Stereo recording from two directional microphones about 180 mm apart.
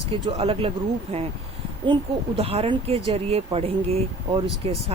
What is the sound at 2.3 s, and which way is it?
Speech, 35° right (ahead or behind).